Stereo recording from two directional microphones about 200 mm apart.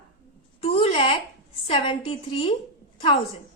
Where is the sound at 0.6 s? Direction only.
30° left (ahead or behind).